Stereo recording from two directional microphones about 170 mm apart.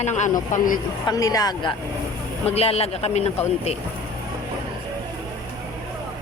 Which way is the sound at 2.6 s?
35° left (ahead or behind).